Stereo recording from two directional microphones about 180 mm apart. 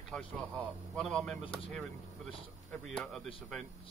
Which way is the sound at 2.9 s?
Centre (ahead or behind).